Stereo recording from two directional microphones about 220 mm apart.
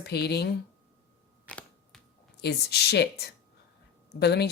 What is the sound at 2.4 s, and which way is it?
Speech, 50° left (ahead or behind).